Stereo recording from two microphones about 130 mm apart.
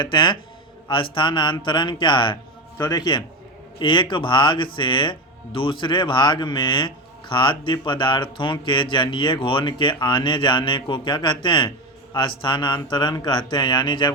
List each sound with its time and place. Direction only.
0.0 s speech: 35° left (ahead or behind)